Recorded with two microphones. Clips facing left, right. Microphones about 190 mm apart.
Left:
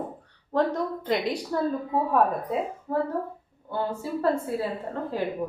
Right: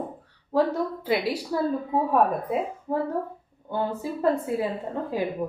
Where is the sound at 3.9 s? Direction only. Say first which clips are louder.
Right 1 dB; 20° right (ahead or behind).